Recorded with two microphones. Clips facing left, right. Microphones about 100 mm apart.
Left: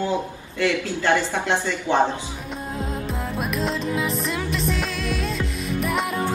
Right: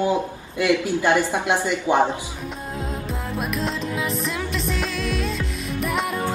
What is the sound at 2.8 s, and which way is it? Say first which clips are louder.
Music: left 1 dB; centre (ahead or behind).